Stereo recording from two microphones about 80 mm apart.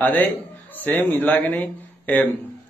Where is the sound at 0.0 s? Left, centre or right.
Left.